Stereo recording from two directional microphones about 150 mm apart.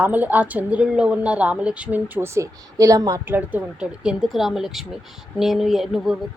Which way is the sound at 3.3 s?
10° right (ahead or behind).